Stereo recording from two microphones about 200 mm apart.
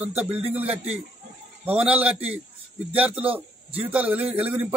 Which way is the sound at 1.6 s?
5° right (ahead or behind).